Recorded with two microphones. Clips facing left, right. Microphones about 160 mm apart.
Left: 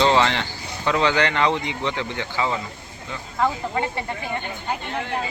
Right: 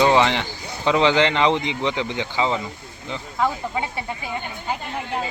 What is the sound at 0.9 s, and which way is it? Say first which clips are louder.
Speech: right 3 dB; 20° right (ahead or behind).